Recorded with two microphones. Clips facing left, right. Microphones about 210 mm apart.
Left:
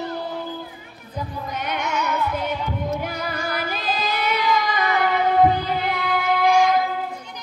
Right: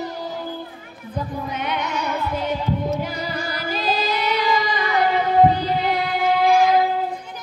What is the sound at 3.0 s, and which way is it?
Music, 55° left (ahead or behind).